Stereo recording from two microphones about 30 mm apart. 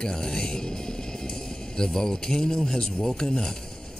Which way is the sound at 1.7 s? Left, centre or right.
Left.